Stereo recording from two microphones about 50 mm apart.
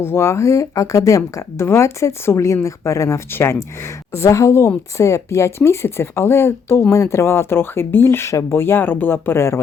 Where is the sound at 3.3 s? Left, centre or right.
Left.